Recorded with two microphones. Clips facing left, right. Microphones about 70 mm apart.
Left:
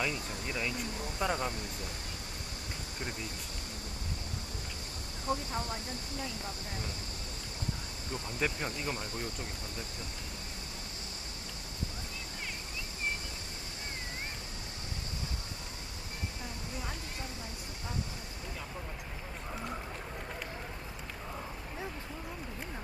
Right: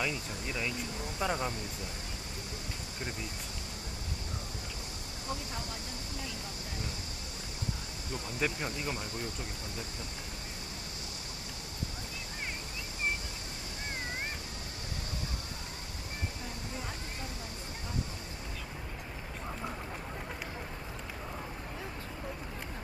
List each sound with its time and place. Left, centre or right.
0.0 s speech: centre
5.3 s speech: left
8.4 s speech: centre